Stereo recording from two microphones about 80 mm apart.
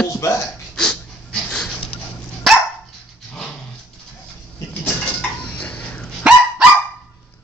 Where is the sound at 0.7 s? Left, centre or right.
Centre.